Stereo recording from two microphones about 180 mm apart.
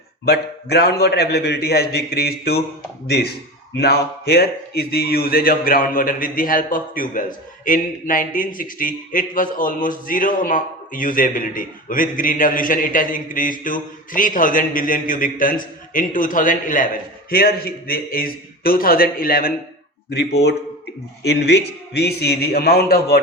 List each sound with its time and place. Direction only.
0.3 s a man's voice: 65° left (ahead or behind)
3.8 s a man's voice: 60° left (ahead or behind)
20.1 s a man's voice: 65° left (ahead or behind)